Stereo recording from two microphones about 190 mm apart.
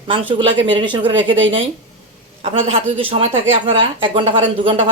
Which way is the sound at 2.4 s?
30° right (ahead or behind).